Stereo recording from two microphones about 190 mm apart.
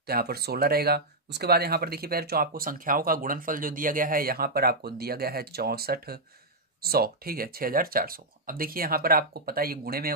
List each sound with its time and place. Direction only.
0.0 s speech: 55° right (ahead or behind)